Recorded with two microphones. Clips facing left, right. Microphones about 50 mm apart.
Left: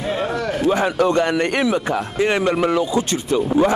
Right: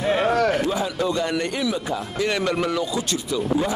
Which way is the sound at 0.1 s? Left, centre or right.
Right.